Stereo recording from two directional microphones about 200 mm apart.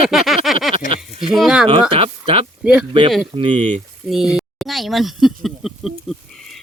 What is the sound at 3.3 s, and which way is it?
Speech, 25° right (ahead or behind).